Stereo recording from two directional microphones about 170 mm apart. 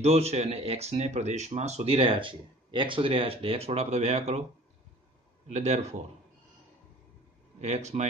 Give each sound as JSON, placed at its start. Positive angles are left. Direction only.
{"t": 0.0, "sound": "speech", "side_deg": -40}
{"t": 5.5, "sound": "speech", "side_deg": -40}
{"t": 7.6, "sound": "speech", "side_deg": -40}